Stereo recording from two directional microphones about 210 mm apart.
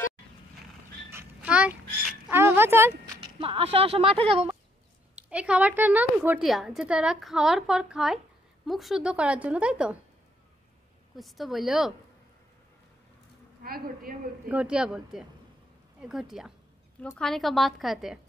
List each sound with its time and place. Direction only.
1.1 s a sound: 5° right (ahead or behind)
3.2 s speech: 25° right (ahead or behind)
5.1 s a woman's voice: 5° right (ahead or behind)
11.1 s a woman's voice: centre (ahead or behind)
13.6 s a woman's voice: 45° right (ahead or behind)
14.5 s a woman's voice: 5° right (ahead or behind)